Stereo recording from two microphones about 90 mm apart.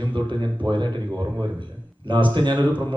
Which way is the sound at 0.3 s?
60° right (ahead or behind).